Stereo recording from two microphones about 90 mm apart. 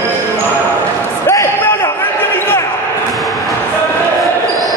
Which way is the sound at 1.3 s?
35° left (ahead or behind).